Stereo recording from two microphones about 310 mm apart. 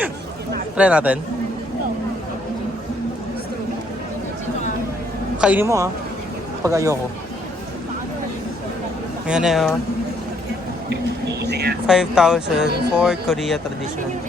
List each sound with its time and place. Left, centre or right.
0.8 s speech: centre
5.4 s a man's voice: centre
9.2 s speech: centre
11.3 s speech: right
11.9 s speech: centre